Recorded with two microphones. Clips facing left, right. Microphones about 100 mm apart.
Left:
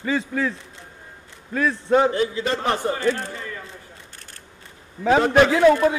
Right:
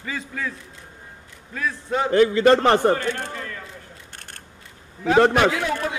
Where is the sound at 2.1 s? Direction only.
60° right (ahead or behind).